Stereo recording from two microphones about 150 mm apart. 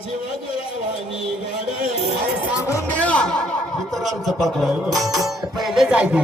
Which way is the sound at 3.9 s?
Centre (ahead or behind).